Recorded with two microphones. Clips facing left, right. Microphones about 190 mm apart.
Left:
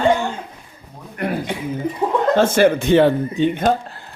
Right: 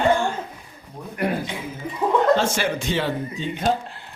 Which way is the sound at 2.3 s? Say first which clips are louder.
Left 8 dB; 55° left (ahead or behind).